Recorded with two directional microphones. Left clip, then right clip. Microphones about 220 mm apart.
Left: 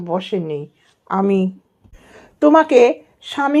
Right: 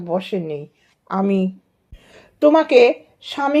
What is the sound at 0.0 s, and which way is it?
Speech, 25° left (ahead or behind).